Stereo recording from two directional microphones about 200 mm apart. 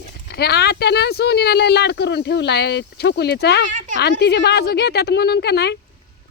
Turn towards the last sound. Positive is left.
turn(degrees=55)  # may be behind; listen again after turning